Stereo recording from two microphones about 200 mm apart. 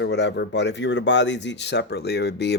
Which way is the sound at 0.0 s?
60° left (ahead or behind).